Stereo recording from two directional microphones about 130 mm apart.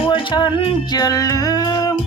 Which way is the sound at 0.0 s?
40° left (ahead or behind).